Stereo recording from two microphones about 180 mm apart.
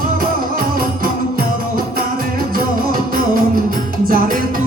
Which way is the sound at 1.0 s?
55° right (ahead or behind).